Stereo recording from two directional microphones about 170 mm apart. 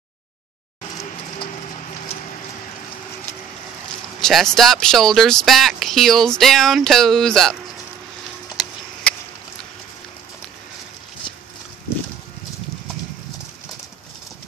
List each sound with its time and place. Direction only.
4.2 s speech: centre (ahead or behind)